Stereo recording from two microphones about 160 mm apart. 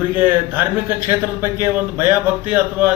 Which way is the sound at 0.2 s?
10° right (ahead or behind).